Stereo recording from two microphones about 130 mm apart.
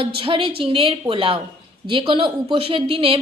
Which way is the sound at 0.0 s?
40° right (ahead or behind).